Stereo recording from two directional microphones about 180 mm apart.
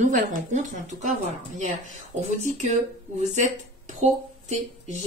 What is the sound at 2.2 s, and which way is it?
A woman's voice, 40° right (ahead or behind).